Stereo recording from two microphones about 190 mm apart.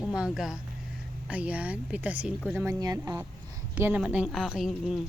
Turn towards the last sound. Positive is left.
turn(degrees=0)  # may be behind; listen again after turning